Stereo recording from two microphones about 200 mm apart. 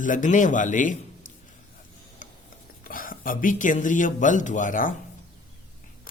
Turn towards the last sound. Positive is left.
turn(degrees=40)  # may be behind; listen again after turning